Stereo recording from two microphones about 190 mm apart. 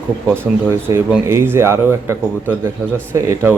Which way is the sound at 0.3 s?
15° right (ahead or behind).